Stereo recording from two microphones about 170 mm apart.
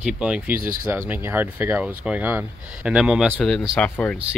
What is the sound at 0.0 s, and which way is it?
Speech, 5° right (ahead or behind).